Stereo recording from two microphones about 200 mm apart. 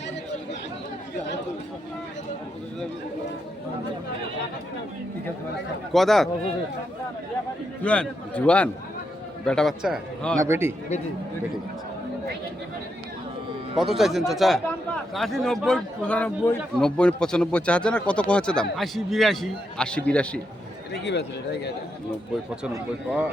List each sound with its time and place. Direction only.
5.9 s a man's voice: centre (ahead or behind)
7.9 s a man's voice: 5° left (ahead or behind)
10.3 s speech: 15° right (ahead or behind)
13.7 s a man's voice: centre (ahead or behind)
20.9 s speech: 55° left (ahead or behind)